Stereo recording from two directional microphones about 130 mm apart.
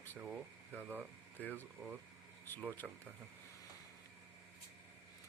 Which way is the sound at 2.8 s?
Centre (ahead or behind).